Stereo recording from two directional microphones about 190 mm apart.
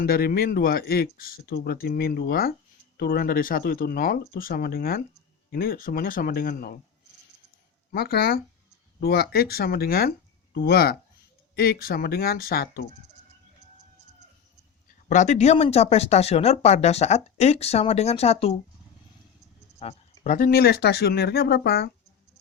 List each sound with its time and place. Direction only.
0.0 s speech: 55° left (ahead or behind)
7.9 s speech: 55° left (ahead or behind)
15.1 s speech: 40° left (ahead or behind)
19.8 s speech: 35° left (ahead or behind); by 21.9 s 55° left (ahead or behind)